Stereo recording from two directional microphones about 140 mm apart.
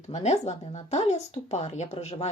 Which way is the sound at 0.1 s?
50° left (ahead or behind).